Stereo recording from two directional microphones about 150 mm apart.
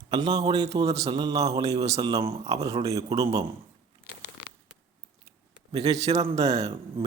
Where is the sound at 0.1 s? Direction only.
25° right (ahead or behind).